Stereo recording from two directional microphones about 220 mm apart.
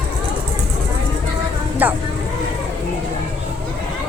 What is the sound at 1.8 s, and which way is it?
Speech, 10° right (ahead or behind).